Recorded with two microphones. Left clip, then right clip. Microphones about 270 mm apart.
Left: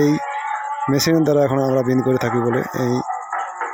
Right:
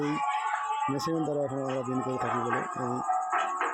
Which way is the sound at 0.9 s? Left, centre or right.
Left.